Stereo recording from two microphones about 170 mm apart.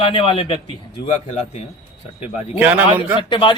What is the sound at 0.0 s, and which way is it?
Speech, 30° left (ahead or behind).